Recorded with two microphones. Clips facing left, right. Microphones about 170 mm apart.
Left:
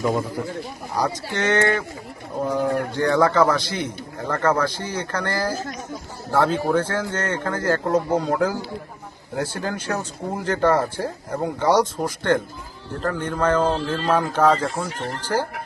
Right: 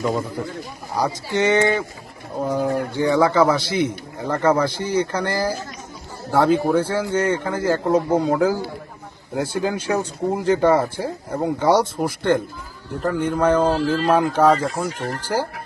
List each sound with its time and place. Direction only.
0.0 s a man's voice: 10° left (ahead or behind)
1.4 s speech: 10° right (ahead or behind)